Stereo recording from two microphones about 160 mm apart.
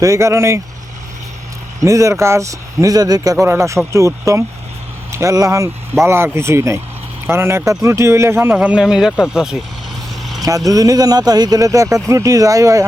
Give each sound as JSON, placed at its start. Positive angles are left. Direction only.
{"t": 0.0, "sound": "speech", "side_deg": -20}
{"t": 1.8, "sound": "speech", "side_deg": -20}
{"t": 10.4, "sound": "speech", "side_deg": -20}